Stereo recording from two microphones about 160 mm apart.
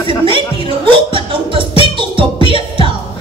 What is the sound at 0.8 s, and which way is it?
Music, 30° right (ahead or behind).